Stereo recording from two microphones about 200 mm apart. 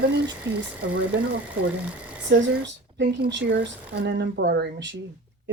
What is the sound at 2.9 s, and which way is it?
Speech, 65° right (ahead or behind).